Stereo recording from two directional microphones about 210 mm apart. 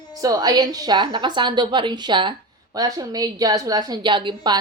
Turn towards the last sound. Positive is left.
turn(degrees=-20)  # may be behind; listen again after turning